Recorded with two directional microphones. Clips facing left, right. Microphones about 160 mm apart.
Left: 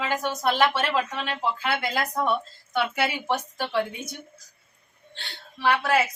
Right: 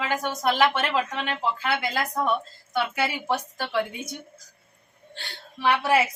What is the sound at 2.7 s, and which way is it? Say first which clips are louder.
A woman's voice: left 1 dB; 10° right (ahead or behind).